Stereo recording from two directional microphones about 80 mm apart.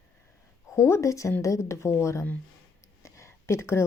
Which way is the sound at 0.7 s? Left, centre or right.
Left.